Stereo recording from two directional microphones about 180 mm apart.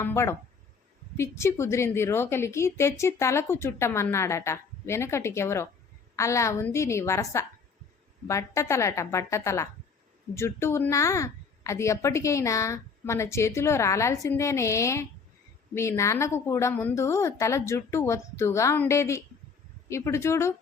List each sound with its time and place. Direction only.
0.0 s a woman's voice: 15° left (ahead or behind)